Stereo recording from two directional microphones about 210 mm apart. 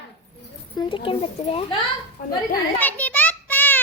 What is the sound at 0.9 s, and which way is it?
Speech, 25° left (ahead or behind).